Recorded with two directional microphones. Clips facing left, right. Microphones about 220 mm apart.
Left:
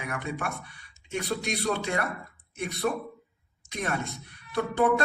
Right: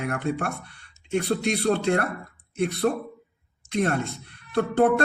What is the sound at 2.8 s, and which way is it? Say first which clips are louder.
Speech: right 4 dB; 35° right (ahead or behind).